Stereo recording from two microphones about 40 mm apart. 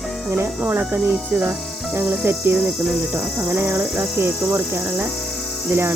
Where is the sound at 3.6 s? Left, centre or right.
Right.